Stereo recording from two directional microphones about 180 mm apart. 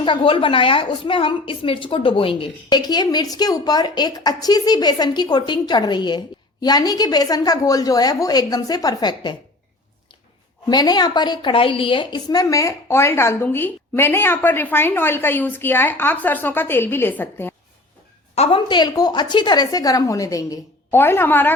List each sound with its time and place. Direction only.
0.0 s a woman's voice: 30° left (ahead or behind)
10.7 s a woman's voice: 20° left (ahead or behind)
18.3 s a woman's voice: 25° left (ahead or behind); by 21.5 s 10° left (ahead or behind)